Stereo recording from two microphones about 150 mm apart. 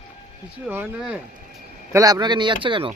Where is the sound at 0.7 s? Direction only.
10° left (ahead or behind).